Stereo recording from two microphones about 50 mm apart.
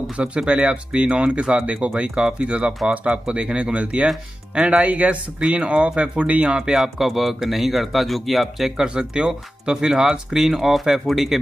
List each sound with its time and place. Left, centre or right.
0.1 s speech: right
6.7 s speech: centre
8.7 s speech: centre